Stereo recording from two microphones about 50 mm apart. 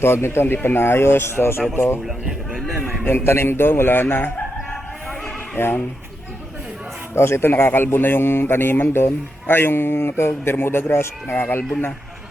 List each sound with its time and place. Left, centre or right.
0.0 s speech: left
2.7 s a man's voice: centre
3.0 s speech: left
5.5 s speech: left
7.2 s speech: left